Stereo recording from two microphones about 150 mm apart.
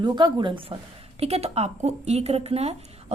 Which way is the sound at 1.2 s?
45° right (ahead or behind).